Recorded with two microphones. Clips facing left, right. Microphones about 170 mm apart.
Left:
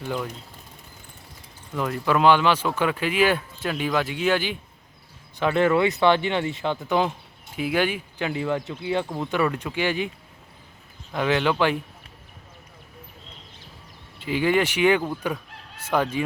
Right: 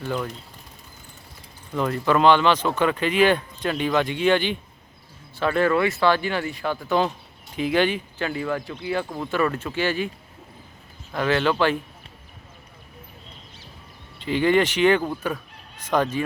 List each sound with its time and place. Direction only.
1.7 s speech: 5° left (ahead or behind)
5.4 s speech: 15° left (ahead or behind)
8.3 s speech: 20° left (ahead or behind)
11.1 s speech: 15° left (ahead or behind)
14.2 s speech: 10° left (ahead or behind)